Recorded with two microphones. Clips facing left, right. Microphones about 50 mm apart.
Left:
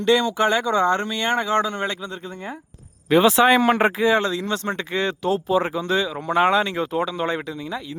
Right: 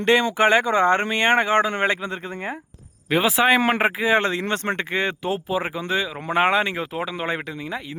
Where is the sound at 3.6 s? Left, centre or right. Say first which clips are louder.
Left 2 dB; right.